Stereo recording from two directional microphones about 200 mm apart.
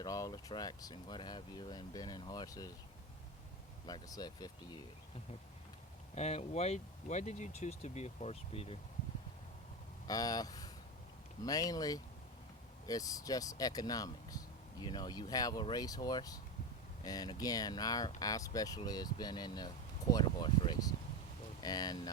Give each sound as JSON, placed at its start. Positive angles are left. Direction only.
{"t": 0.0, "sound": "speech", "side_deg": 20}
{"t": 3.8, "sound": "speech", "side_deg": 20}
{"t": 6.1, "sound": "speech", "side_deg": 35}
{"t": 10.1, "sound": "speech", "side_deg": 20}